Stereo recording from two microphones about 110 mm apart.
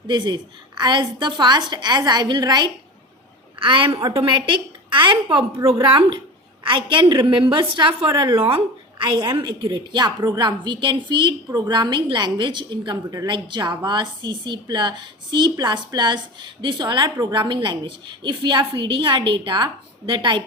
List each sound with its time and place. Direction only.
0.1 s a woman's voice: 45° right (ahead or behind)